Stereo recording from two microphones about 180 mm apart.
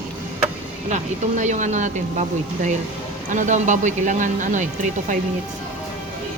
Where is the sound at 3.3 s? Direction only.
45° right (ahead or behind).